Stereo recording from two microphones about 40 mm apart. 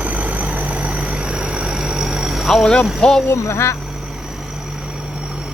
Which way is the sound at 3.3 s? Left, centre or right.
Left.